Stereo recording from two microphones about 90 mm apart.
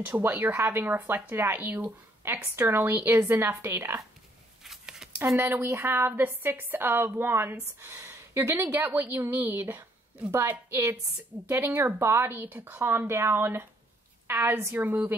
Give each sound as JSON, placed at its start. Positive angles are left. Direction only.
{"t": 0.0, "sound": "a woman's voice", "side_deg": -25}
{"t": 4.6, "sound": "a sound", "side_deg": -5}
{"t": 5.2, "sound": "a woman's voice", "side_deg": -30}